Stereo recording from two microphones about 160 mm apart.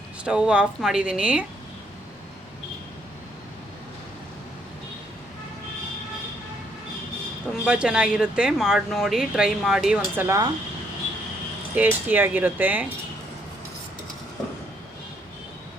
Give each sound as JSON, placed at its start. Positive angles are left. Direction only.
{"t": 0.3, "sound": "speech", "side_deg": -5}
{"t": 7.6, "sound": "speech", "side_deg": -5}
{"t": 10.2, "sound": "speech", "side_deg": -20}
{"t": 11.7, "sound": "speech", "side_deg": -10}